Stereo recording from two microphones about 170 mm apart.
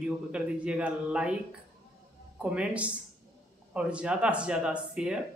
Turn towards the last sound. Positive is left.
turn(degrees=-5)  # may be behind; listen again after turning